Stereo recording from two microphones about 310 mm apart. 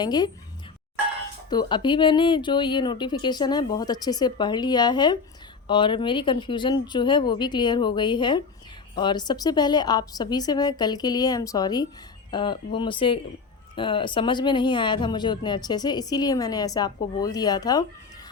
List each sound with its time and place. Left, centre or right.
0.0 s speech: centre
1.5 s speech: centre